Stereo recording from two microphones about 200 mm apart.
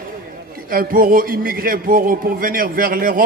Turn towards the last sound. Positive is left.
turn(degrees=-45)  # may be behind; listen again after turning